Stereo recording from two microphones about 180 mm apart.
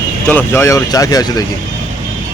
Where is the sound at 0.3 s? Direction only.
10° left (ahead or behind).